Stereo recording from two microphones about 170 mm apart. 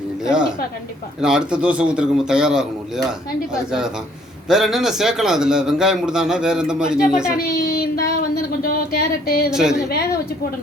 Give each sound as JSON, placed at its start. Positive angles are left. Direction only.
{"t": 1.2, "sound": "a man's voice", "side_deg": -5}
{"t": 7.3, "sound": "a sound", "side_deg": 65}
{"t": 9.5, "sound": "a man's voice", "side_deg": -5}